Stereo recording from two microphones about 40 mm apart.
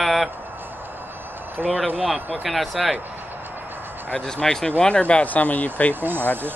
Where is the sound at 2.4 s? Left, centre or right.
Centre.